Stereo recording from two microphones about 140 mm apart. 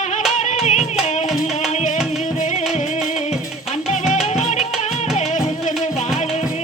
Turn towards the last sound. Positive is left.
turn(degrees=50)  # may be behind; listen again after turning